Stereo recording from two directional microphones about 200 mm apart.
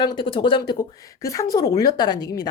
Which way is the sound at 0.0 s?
25° left (ahead or behind).